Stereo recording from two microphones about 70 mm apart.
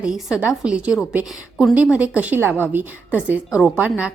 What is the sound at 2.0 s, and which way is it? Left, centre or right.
Speech, right.